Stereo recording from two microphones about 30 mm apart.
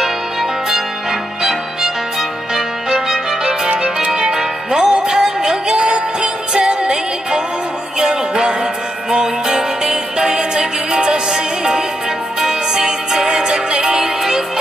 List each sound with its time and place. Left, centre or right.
0.0 s music: centre
2.5 s music: centre